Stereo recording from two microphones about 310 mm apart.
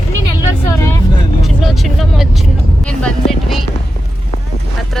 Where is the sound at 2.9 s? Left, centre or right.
Centre.